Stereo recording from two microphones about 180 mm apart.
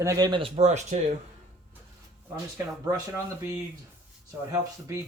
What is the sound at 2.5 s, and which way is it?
Speech, 15° right (ahead or behind).